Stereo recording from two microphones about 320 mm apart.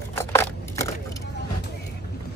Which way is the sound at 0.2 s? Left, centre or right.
Centre.